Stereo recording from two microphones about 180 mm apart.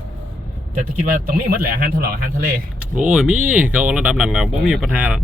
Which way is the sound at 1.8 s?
55° right (ahead or behind).